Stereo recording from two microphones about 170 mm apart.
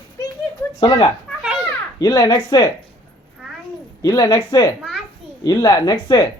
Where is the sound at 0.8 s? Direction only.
35° left (ahead or behind).